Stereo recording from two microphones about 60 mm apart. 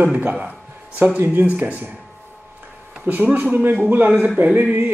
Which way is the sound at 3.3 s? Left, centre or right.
Right.